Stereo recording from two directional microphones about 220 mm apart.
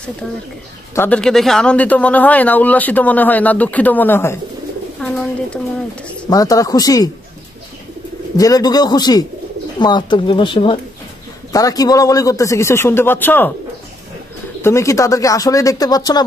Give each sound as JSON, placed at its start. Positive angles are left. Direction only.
{"t": 0.9, "sound": "speech", "side_deg": 5}
{"t": 6.3, "sound": "speech", "side_deg": 15}
{"t": 8.4, "sound": "speech", "side_deg": 15}
{"t": 14.6, "sound": "speech", "side_deg": 15}